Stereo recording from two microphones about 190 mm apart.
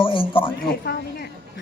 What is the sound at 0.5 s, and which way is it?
Speech, 55° left (ahead or behind).